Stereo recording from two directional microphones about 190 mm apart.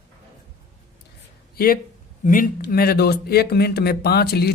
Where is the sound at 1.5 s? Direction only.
50° left (ahead or behind).